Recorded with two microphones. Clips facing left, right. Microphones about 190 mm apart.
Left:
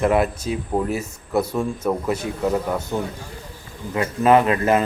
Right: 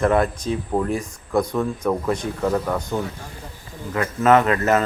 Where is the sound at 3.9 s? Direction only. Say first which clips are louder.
Left 1 dB; 15° left (ahead or behind).